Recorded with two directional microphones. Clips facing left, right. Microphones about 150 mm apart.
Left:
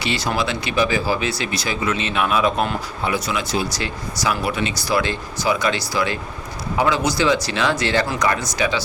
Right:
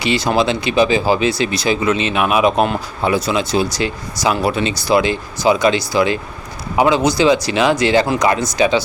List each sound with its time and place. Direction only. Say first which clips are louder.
0.0 s speech: right 6 dB; 20° right (ahead or behind)